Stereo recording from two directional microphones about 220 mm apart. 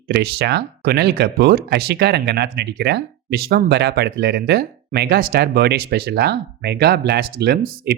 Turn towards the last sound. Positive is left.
turn(degrees=-45)  # may be behind; listen again after turning